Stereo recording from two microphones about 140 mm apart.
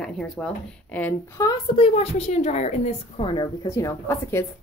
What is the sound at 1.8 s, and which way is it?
A woman's voice, 50° left (ahead or behind).